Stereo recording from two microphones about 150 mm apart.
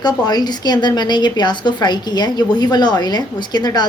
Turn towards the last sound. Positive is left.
turn(degrees=25)  # may be behind; listen again after turning